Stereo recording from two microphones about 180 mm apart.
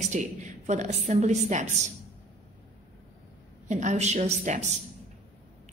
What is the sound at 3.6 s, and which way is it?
A woman's voice, 40° right (ahead or behind).